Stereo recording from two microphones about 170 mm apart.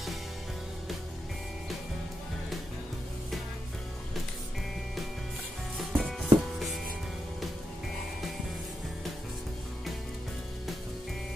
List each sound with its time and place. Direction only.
5.8 s music: centre (ahead or behind)